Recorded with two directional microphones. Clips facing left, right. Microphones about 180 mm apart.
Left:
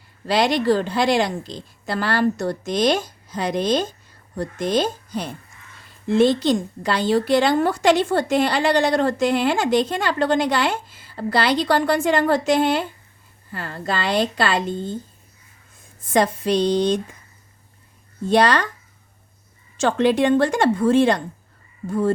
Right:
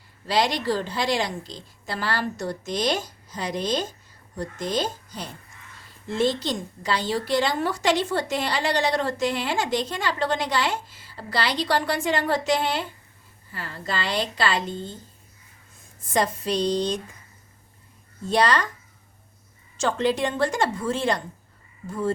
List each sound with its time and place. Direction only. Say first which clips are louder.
0.3 s a woman's voice: left 5 dB; 55° left (ahead or behind)
16.1 s a woman's voice: left 5 dB; 60° left (ahead or behind)
18.3 s a woman's voice: left 4 dB; 60° left (ahead or behind)
19.8 s a woman's voice: left 6 dB; 60° left (ahead or behind)